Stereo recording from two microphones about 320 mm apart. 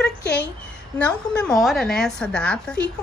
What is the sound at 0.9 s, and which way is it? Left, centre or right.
A woman's voice, centre.